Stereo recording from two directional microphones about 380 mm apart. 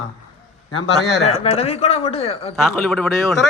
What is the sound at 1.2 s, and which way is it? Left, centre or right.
Speech, centre.